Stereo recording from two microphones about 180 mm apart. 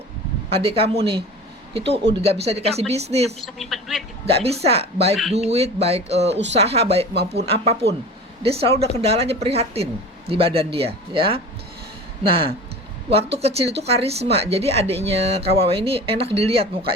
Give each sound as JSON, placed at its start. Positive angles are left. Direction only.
{"t": 0.5, "sound": "a woman's voice", "side_deg": -30}
{"t": 3.4, "sound": "a man's voice", "side_deg": 0}
{"t": 4.3, "sound": "a woman's voice", "side_deg": -35}